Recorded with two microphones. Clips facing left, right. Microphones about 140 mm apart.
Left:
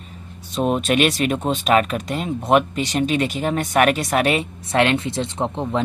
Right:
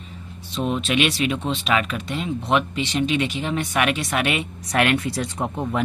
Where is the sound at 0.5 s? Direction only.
45° left (ahead or behind).